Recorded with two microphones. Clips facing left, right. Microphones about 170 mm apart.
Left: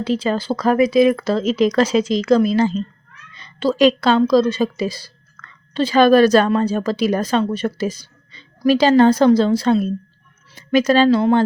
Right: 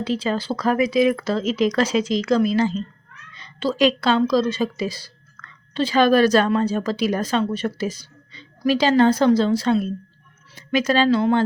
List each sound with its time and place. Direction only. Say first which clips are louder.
0.0 s a woman's voice: left 3 dB; 45° left (ahead or behind)